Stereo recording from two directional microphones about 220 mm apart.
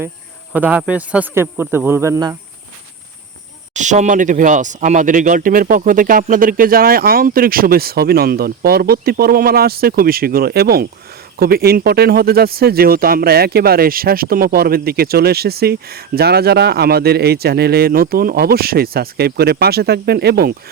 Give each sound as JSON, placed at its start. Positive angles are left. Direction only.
{"t": 0.5, "sound": "speech", "side_deg": -5}
{"t": 3.8, "sound": "speech", "side_deg": -35}